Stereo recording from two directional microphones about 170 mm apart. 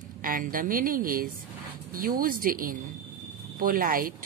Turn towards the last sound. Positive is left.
turn(degrees=-55)  # may be behind; listen again after turning